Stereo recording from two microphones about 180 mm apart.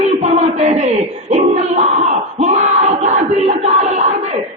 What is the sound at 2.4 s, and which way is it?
Battle cry, 40° right (ahead or behind).